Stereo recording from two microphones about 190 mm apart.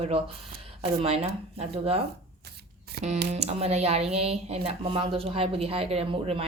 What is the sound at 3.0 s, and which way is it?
Speech, 55° right (ahead or behind).